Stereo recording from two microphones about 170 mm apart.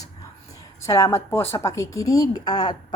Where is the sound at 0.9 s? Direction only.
20° left (ahead or behind).